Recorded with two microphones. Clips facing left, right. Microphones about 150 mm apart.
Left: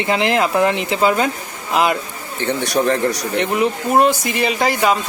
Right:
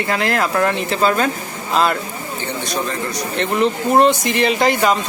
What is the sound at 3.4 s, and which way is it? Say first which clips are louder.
Speech: right 2 dB; 10° left (ahead or behind).